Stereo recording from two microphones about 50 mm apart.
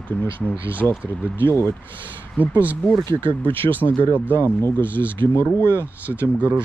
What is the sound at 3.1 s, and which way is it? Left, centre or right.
Speech, left.